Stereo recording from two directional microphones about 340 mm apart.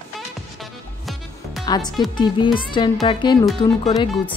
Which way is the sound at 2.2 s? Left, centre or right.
Centre.